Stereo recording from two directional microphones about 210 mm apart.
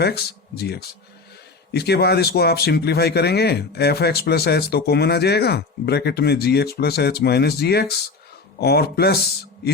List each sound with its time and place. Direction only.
0.0 s speech: 50° left (ahead or behind)